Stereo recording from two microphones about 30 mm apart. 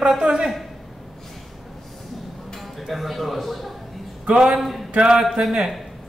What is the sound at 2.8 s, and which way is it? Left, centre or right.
Speech, centre.